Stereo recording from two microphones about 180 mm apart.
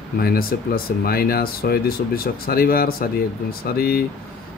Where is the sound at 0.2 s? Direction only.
55° left (ahead or behind).